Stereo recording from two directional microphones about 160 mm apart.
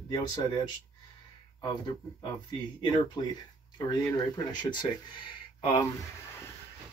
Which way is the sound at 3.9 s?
25° left (ahead or behind).